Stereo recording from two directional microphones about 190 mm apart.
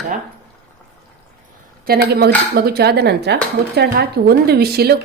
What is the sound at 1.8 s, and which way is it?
A woman's voice, 55° right (ahead or behind).